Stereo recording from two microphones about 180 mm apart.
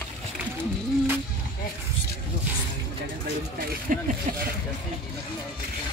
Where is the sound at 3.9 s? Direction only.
50° right (ahead or behind).